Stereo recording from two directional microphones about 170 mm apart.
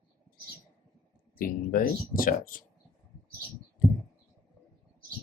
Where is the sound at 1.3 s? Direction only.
55° left (ahead or behind).